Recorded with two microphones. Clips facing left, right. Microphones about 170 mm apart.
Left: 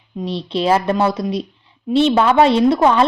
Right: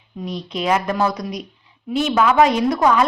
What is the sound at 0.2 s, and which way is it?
A woman's voice, 30° left (ahead or behind).